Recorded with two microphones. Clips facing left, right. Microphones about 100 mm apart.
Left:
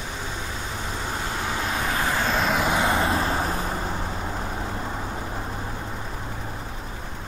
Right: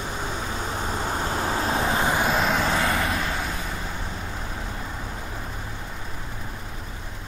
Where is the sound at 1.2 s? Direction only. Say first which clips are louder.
Right 2 dB; 40° right (ahead or behind); by 2.3 s 20° right (ahead or behind).